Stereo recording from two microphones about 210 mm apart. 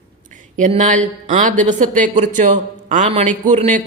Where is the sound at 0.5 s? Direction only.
35° right (ahead or behind).